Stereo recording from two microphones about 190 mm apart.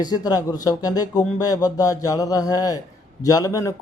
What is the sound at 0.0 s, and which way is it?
Speech, 20° left (ahead or behind).